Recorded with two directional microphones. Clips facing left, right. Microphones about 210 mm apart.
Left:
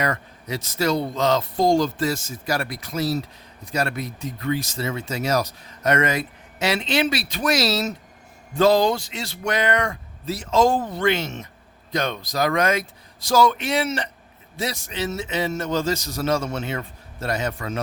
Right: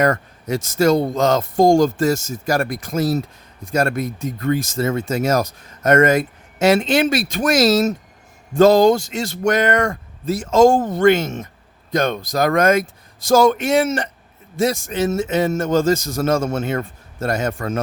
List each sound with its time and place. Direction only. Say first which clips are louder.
0.0 s speech: right 8 dB; 45° right (ahead or behind)